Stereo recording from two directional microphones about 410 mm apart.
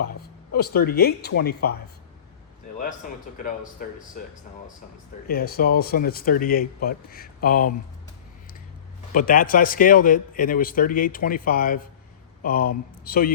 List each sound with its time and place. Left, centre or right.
0.2 s speech: left
3.8 s a man's voice: centre
9.1 s a man's voice: centre